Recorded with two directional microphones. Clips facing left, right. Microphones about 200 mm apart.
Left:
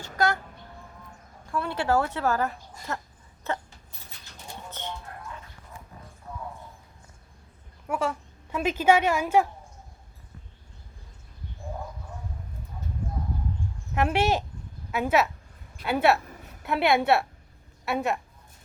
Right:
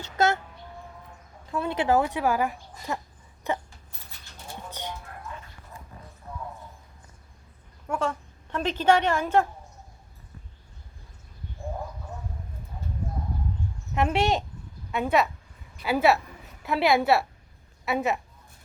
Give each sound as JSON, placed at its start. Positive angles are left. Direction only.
{"t": 0.2, "sound": "a child's voice", "side_deg": -25}
{"t": 1.5, "sound": "speech", "side_deg": -20}
{"t": 3.5, "sound": "a sound", "side_deg": -15}
{"t": 4.7, "sound": "a sound", "side_deg": -10}
{"t": 7.9, "sound": "a woman's voice", "side_deg": 10}
{"t": 13.9, "sound": "a woman's voice", "side_deg": 0}